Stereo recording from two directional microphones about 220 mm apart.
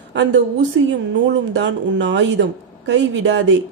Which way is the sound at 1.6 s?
55° right (ahead or behind).